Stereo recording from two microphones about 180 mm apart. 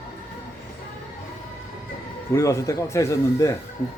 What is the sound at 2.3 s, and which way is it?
A man's voice, 15° left (ahead or behind).